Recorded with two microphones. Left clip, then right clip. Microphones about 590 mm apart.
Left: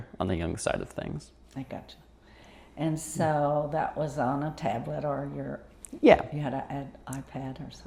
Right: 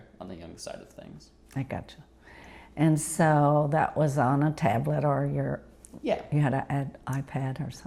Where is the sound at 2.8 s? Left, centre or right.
Right.